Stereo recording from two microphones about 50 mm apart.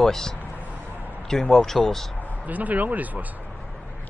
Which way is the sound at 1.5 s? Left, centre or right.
Centre.